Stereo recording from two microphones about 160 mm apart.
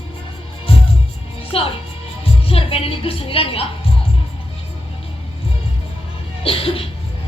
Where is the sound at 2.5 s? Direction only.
35° left (ahead or behind).